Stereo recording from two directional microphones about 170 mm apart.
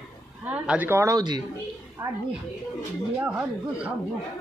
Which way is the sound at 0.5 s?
10° right (ahead or behind).